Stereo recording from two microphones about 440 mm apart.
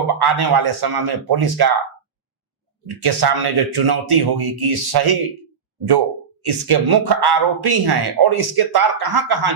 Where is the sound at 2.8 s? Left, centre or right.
Right.